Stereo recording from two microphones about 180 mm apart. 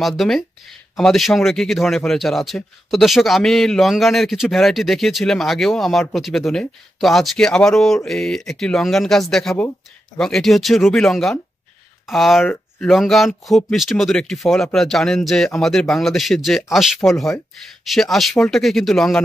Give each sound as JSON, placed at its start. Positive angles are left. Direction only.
{"t": 0.0, "sound": "a man's voice", "side_deg": 0}